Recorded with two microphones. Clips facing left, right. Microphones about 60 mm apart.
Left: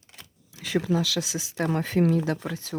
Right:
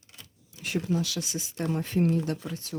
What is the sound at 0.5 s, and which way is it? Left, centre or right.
Speech, left.